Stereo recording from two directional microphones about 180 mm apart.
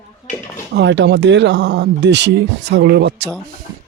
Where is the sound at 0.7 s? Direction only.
80° right.